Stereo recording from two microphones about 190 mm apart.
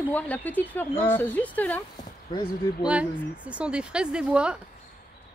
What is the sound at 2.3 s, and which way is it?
Speech, 20° left (ahead or behind).